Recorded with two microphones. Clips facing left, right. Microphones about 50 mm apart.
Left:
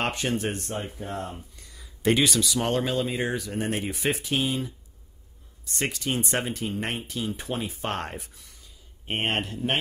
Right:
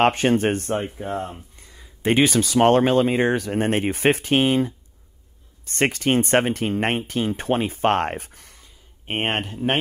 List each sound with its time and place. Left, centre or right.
0.0 s speech: right
0.8 s speech: right
9.0 s speech: right